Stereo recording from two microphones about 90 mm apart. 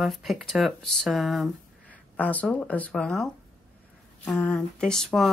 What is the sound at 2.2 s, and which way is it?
Speech, 20° left (ahead or behind).